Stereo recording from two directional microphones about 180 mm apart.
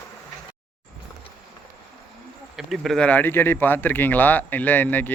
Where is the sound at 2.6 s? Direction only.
Centre (ahead or behind).